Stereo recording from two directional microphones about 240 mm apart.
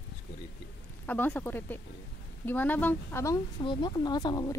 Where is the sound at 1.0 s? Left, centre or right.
Centre.